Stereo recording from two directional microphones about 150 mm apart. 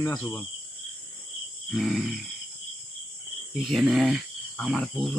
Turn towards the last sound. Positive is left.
turn(degrees=5)  # may be behind; listen again after turning